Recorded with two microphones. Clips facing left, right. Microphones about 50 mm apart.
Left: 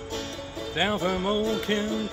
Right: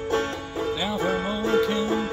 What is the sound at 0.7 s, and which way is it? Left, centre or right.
Music, left.